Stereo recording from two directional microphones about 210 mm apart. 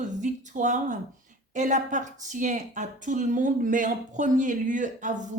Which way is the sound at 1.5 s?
35° right (ahead or behind).